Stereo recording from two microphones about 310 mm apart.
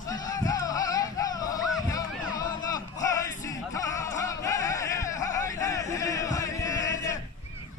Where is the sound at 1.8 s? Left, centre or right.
Centre.